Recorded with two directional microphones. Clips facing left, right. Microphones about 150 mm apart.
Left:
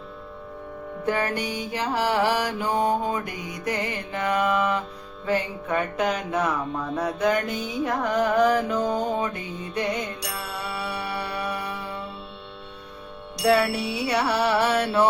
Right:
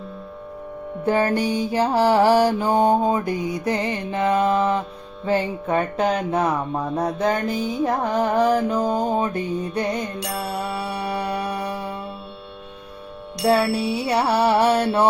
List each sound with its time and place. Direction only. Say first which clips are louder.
1.0 s music: right 6 dB; 30° right (ahead or behind)
13.4 s music: right 2 dB; 30° right (ahead or behind)